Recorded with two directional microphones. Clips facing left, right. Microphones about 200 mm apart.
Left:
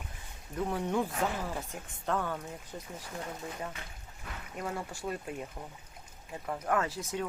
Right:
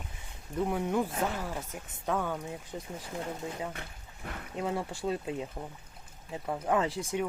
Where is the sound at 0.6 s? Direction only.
10° right (ahead or behind).